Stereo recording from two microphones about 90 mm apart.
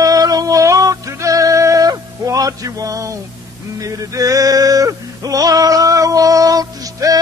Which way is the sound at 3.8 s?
40° right (ahead or behind).